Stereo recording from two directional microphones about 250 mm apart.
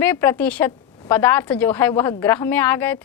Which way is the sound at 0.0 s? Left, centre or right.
Centre.